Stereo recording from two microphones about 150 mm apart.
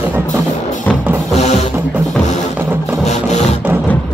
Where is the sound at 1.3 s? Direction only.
45° left (ahead or behind).